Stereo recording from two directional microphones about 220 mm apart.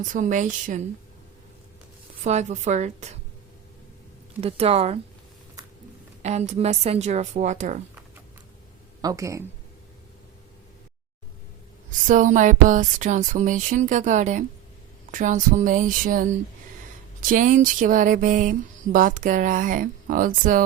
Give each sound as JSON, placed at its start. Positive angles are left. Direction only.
{"t": 0.0, "sound": "speech", "side_deg": -35}
{"t": 2.2, "sound": "speech", "side_deg": -30}
{"t": 4.4, "sound": "speech", "side_deg": -25}
{"t": 6.2, "sound": "speech", "side_deg": -30}
{"t": 9.0, "sound": "speech", "side_deg": -15}
{"t": 11.9, "sound": "speech", "side_deg": -35}